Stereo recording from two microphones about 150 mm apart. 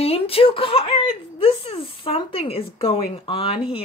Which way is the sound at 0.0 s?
40° left (ahead or behind).